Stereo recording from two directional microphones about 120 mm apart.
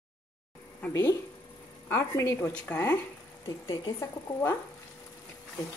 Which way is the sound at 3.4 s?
30° left (ahead or behind).